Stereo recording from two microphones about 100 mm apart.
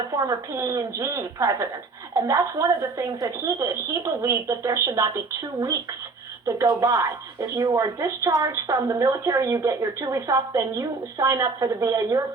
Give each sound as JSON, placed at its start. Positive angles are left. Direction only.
{"t": 0.2, "sound": "a woman's voice", "side_deg": -35}